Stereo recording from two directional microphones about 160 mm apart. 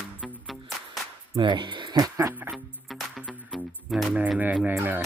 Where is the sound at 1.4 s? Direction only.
30° right (ahead or behind); by 2.6 s 10° right (ahead or behind).